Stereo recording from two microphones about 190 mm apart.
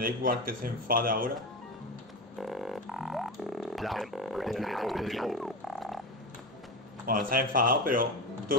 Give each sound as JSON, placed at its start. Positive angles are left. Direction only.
{"t": 0.0, "sound": "speech", "side_deg": -50}
{"t": 2.4, "sound": "didgeridoo", "side_deg": 0}
{"t": 7.1, "sound": "speech", "side_deg": -50}